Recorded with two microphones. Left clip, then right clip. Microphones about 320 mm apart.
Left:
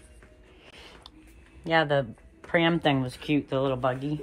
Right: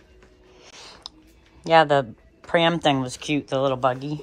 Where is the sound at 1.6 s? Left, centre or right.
Centre.